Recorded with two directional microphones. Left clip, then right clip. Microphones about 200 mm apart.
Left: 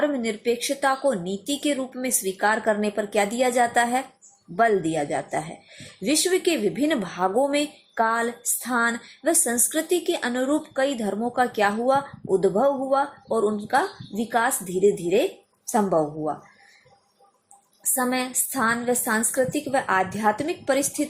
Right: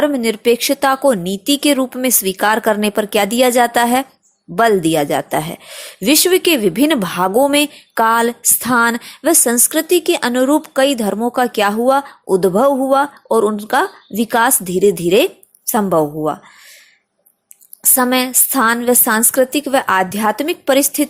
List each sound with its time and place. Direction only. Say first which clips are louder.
0.0 s speech: right 9 dB; 40° right (ahead or behind)
17.9 s speech: right 10 dB; 40° right (ahead or behind)